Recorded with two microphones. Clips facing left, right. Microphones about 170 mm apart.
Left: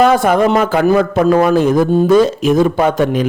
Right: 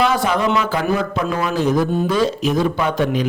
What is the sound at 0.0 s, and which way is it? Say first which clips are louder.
Speech: left 7 dB; 50° left (ahead or behind).